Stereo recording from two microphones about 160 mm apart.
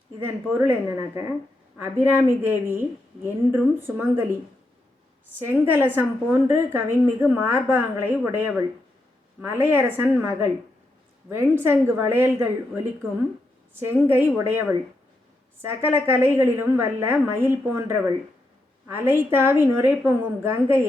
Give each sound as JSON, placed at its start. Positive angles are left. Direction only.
{"t": 0.3, "sound": "a woman's voice", "side_deg": -15}
{"t": 5.4, "sound": "a woman's voice", "side_deg": -15}